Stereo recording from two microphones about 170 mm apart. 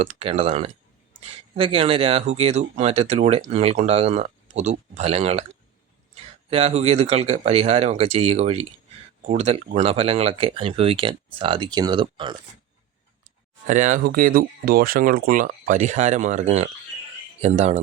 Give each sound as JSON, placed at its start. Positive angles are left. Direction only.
{"t": 0.0, "sound": "speech", "side_deg": -35}
{"t": 6.5, "sound": "speech", "side_deg": -35}
{"t": 13.7, "sound": "speech", "side_deg": -45}